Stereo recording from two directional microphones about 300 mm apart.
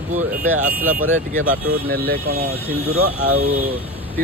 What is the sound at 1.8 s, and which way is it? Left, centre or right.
Speech, right.